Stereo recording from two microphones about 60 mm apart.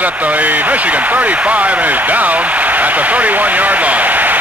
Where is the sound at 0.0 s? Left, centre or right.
Right.